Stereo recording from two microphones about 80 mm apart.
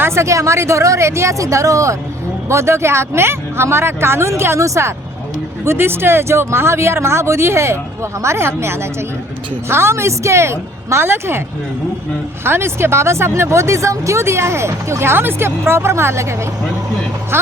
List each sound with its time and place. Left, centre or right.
0.0 s speech: right
12.5 s speech: right